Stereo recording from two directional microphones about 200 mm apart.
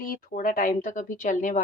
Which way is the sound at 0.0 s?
45° left (ahead or behind).